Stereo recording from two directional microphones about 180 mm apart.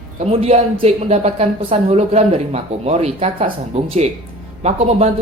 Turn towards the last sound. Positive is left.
turn(degrees=-35)  # may be behind; listen again after turning